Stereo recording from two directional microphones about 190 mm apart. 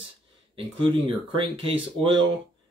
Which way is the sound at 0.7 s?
25° right (ahead or behind).